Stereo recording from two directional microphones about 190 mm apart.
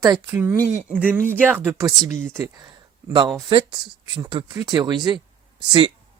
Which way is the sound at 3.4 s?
25° right (ahead or behind).